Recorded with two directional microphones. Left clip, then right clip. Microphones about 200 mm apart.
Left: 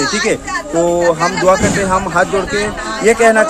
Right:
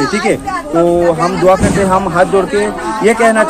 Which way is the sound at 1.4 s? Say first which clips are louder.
Right 3 dB; 10° left (ahead or behind).